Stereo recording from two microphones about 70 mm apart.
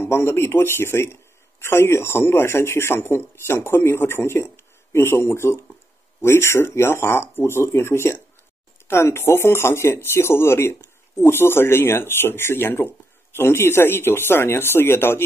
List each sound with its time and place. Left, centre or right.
0.0 s speech: left